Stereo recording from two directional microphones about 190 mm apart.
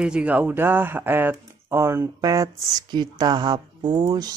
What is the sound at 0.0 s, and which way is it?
Speech, 5° right (ahead or behind).